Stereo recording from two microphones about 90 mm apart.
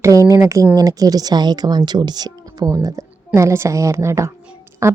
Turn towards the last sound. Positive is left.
turn(degrees=-30)  # may be behind; listen again after turning